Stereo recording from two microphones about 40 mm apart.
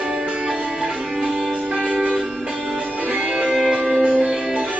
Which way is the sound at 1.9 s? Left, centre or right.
Right.